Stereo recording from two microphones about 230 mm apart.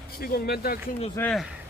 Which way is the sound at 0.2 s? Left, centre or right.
Left.